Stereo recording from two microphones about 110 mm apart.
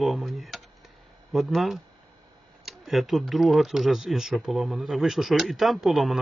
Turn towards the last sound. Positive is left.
turn(degrees=0)  # may be behind; listen again after turning